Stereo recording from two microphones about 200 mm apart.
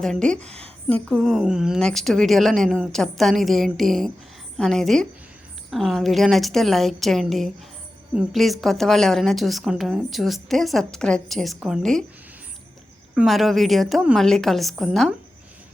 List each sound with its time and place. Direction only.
0.0 s a woman's voice: 5° left (ahead or behind)
0.4 s a woman's voice: 30° right (ahead or behind)
0.9 s a woman's voice: 5° left (ahead or behind)
13.1 s a woman's voice: centre (ahead or behind)